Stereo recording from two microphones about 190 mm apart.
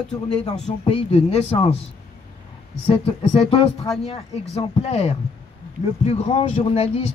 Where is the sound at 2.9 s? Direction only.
30° left (ahead or behind).